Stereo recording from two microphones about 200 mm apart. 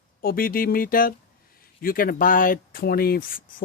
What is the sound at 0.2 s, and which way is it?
Speech, 45° left (ahead or behind).